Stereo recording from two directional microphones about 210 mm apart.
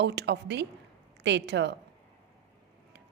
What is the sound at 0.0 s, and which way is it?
A woman's voice, 55° right (ahead or behind).